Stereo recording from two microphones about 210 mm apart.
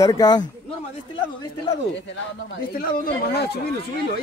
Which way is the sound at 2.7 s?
45° left (ahead or behind).